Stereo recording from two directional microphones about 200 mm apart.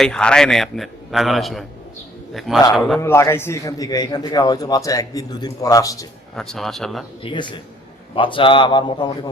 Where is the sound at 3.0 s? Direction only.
15° left (ahead or behind).